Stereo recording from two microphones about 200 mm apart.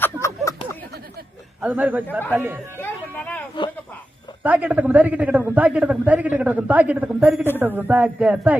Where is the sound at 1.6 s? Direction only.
10° right (ahead or behind).